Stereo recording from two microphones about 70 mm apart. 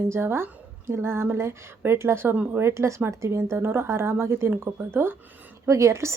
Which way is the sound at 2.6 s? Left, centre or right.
Right.